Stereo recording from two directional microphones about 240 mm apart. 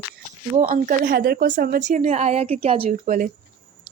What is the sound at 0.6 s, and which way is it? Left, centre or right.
A woman's voice, right.